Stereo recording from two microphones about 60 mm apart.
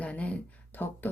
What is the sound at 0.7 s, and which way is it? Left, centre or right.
Speech, left.